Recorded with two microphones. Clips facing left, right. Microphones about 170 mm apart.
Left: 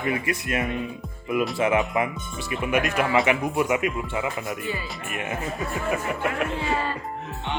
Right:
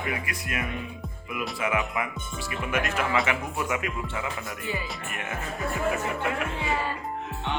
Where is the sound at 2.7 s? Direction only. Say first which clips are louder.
Left 4 dB; 15° left (ahead or behind).